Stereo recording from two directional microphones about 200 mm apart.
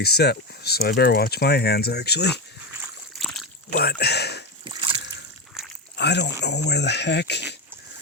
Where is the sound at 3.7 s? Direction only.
50° left (ahead or behind).